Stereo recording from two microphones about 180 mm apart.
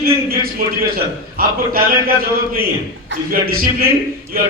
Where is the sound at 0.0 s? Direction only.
55° right (ahead or behind).